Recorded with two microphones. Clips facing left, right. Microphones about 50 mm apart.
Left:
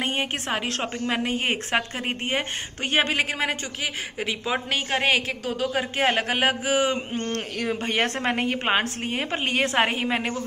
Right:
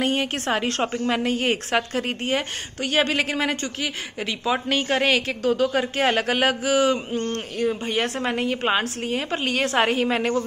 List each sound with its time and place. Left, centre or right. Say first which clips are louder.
0.0 s a sound: right 4 dB; left
0.5 s a woman's voice: right 4 dB; centre
1.1 s a woman's voice: even; centre
3.1 s speech: right 2 dB; centre; by 7.3 s left
7.3 s a man's voice: right 3 dB; left
8.2 s a woman's voice: right 1 dB; left; by 10.0 s centre
10.0 s speech: right 3 dB; centre